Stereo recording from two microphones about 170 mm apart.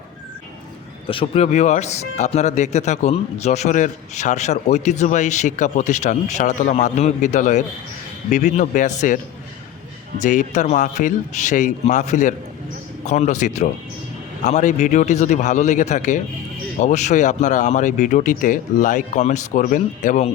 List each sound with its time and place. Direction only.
1.0 s speech: 30° left (ahead or behind)
10.2 s speech: 45° left (ahead or behind)